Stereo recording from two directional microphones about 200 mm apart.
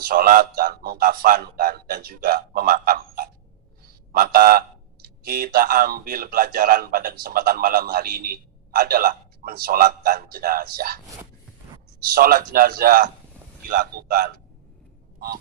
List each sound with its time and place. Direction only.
0.0 s speech: 45° right (ahead or behind)
12.1 s speech: 45° right (ahead or behind)